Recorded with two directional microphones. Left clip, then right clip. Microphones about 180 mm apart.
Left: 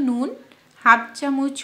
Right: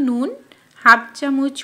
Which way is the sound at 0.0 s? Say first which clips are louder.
Right 3 dB; 15° right (ahead or behind).